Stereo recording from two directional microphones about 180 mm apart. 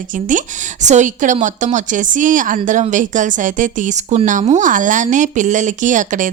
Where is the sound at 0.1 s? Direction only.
45° right (ahead or behind).